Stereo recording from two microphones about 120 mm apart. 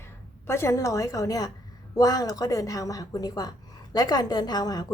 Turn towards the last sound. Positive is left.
turn(degrees=35)  # may be behind; listen again after turning